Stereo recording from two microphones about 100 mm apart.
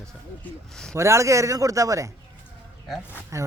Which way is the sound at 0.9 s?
30° right (ahead or behind).